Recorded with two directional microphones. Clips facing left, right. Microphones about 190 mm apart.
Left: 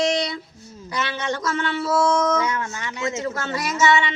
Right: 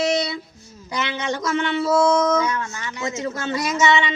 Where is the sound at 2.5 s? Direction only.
20° left (ahead or behind).